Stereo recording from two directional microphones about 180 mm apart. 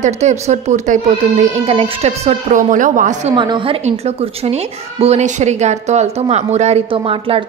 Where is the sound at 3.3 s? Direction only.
25° right (ahead or behind).